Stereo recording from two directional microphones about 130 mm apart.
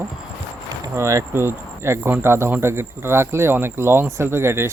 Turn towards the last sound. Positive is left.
turn(degrees=-20)  # may be behind; listen again after turning